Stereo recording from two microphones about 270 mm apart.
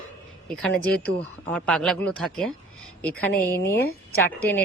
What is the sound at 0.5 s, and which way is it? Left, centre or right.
Speech, centre.